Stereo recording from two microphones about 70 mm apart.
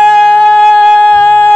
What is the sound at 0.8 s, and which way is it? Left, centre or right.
Music, centre.